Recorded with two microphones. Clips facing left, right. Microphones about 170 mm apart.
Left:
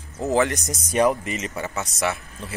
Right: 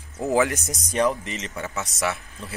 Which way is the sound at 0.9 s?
10° left (ahead or behind).